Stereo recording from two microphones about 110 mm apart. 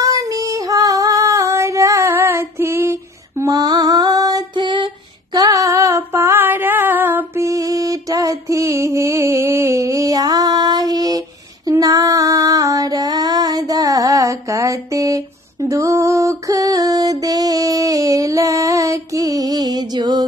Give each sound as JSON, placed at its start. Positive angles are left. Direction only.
{"t": 0.0, "sound": "female singing", "side_deg": -30}
{"t": 5.3, "sound": "female singing", "side_deg": -35}